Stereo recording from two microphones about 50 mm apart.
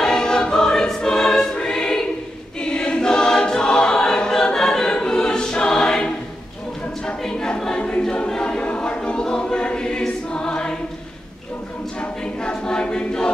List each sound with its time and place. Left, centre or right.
0.0 s choir: centre
12.0 s choir: centre